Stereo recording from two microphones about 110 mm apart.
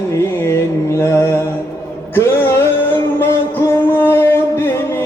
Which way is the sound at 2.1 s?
20° left (ahead or behind).